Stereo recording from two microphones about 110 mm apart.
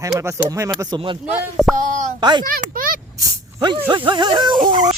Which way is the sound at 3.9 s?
45° right (ahead or behind).